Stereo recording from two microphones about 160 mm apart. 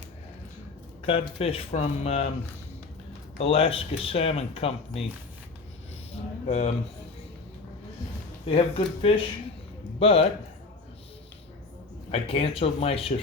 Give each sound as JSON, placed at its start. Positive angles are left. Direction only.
{"t": 1.0, "sound": "speech", "side_deg": 35}
{"t": 3.3, "sound": "speech", "side_deg": 35}
{"t": 6.5, "sound": "speech", "side_deg": 45}
{"t": 8.4, "sound": "speech", "side_deg": 35}
{"t": 12.1, "sound": "speech", "side_deg": 35}